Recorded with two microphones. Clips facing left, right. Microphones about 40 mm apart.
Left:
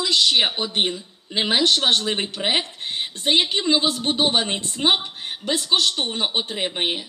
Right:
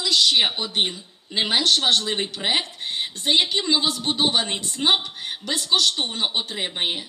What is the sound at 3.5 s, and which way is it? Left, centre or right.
Speech, centre.